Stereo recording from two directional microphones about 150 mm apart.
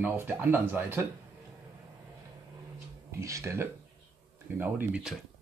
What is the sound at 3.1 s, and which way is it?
Speech, 20° right (ahead or behind).